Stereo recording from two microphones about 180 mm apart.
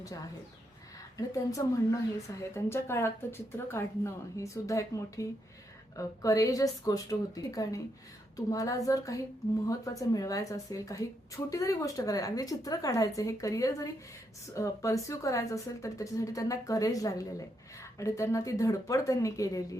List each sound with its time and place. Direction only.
1.1 s a woman's voice: 20° left (ahead or behind)